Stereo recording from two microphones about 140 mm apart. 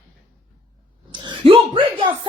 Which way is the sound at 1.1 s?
35° right (ahead or behind).